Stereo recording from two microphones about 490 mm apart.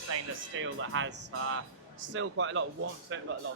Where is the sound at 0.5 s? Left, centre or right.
Right.